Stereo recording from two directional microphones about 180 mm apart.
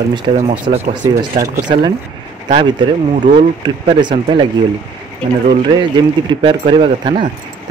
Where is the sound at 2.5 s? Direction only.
30° right (ahead or behind).